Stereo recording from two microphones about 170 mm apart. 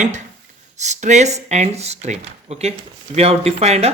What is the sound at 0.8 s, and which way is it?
Speech, 45° right (ahead or behind).